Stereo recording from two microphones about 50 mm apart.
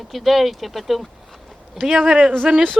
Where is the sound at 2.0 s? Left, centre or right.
Right.